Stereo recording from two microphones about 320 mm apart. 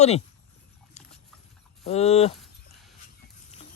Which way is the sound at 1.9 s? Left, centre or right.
Centre.